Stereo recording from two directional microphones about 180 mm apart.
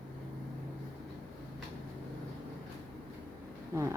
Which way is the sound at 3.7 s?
15° right (ahead or behind).